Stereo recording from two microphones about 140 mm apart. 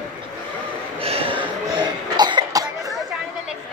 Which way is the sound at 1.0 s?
45° right (ahead or behind).